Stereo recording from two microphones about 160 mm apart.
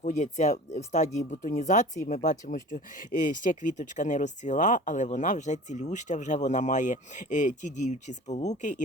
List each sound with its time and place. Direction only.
0.0 s speech: 50° left (ahead or behind)